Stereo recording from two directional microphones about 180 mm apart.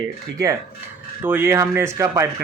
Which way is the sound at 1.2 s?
10° right (ahead or behind).